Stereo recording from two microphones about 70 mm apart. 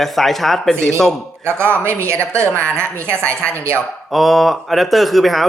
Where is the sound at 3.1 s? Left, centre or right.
Centre.